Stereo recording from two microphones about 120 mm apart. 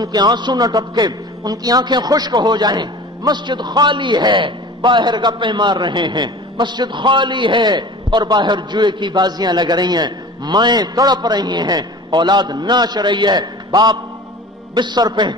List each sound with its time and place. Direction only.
0.0 s a man's voice: 35° right (ahead or behind)